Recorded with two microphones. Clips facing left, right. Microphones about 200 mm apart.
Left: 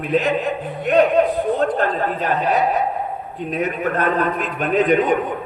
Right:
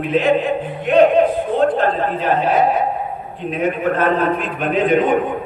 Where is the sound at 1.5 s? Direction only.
45° left (ahead or behind).